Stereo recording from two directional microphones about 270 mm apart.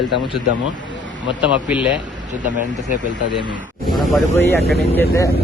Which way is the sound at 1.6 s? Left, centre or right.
Centre.